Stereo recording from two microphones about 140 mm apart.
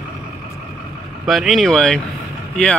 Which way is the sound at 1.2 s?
Centre (ahead or behind).